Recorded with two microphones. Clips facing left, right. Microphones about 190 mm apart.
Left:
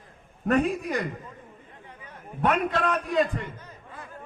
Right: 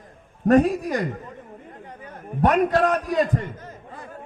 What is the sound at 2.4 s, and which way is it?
A man's voice, 40° right (ahead or behind).